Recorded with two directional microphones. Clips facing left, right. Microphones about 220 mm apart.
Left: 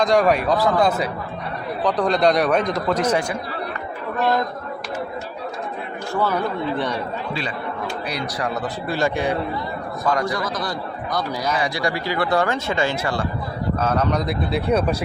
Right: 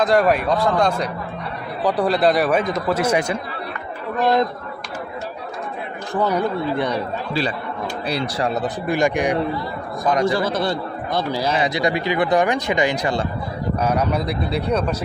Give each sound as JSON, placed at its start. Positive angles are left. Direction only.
{"t": 0.0, "sound": "speech", "side_deg": 0}
{"t": 1.8, "sound": "speech", "side_deg": -10}
{"t": 4.2, "sound": "a man's voice", "side_deg": -20}
{"t": 6.1, "sound": "speech", "side_deg": -15}
{"t": 8.0, "sound": "a man's voice", "side_deg": -30}